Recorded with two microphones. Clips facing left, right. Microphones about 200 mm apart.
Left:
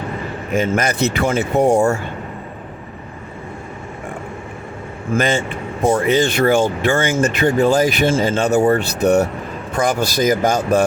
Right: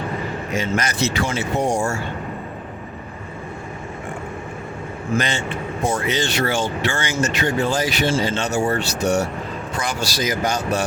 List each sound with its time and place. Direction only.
0.5 s speech: 55° left (ahead or behind)
5.1 s speech: 50° left (ahead or behind)